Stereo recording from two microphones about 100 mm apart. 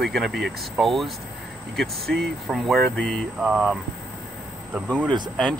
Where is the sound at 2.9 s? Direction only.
10° left (ahead or behind).